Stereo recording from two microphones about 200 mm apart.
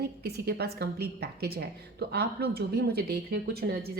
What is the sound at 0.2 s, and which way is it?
A woman's voice, 55° right (ahead or behind).